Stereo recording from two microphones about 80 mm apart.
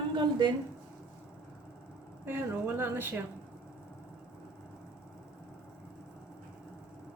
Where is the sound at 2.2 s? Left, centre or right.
Right.